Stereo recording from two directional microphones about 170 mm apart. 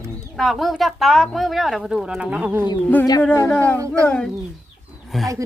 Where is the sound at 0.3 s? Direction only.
Centre (ahead or behind).